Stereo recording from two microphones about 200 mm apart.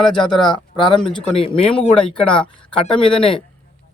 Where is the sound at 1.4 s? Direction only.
30° left (ahead or behind).